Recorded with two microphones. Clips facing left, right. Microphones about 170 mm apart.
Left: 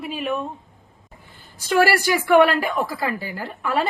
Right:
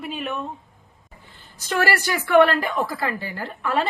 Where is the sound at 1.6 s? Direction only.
10° left (ahead or behind).